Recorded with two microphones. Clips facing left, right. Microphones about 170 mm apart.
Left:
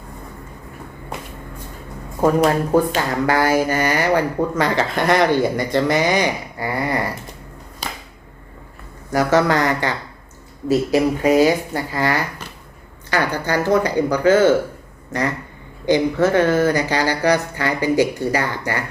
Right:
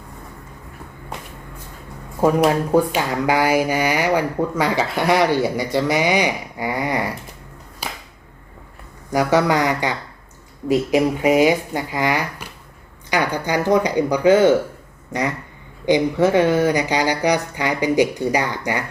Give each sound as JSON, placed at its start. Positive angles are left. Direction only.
{"t": 2.2, "sound": "speech", "side_deg": -10}
{"t": 7.8, "sound": "finger snapping", "side_deg": -10}
{"t": 9.0, "sound": "speech", "side_deg": -15}